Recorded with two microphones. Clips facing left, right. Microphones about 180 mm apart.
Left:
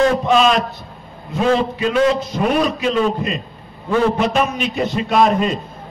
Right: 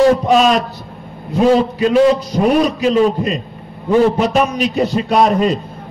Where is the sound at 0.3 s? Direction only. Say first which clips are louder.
Right 2 dB; 40° right (ahead or behind).